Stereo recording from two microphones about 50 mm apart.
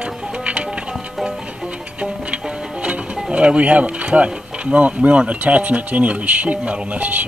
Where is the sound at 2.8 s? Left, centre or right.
Right.